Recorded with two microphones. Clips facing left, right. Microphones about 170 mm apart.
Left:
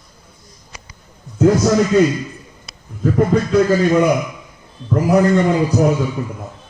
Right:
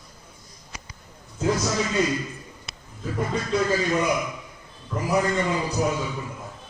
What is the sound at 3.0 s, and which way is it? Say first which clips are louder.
A man's voice: left 12 dB; 60° left (ahead or behind).